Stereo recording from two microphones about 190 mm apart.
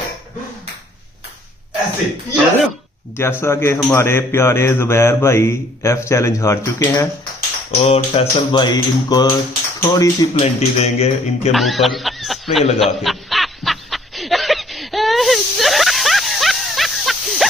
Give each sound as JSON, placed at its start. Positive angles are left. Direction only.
{"t": 3.2, "sound": "speech", "side_deg": 15}
{"t": 7.3, "sound": "speech", "side_deg": 35}
{"t": 10.4, "sound": "speech", "side_deg": 35}
{"t": 11.5, "sound": "speech", "side_deg": 0}
{"t": 12.7, "sound": "snicker", "side_deg": 0}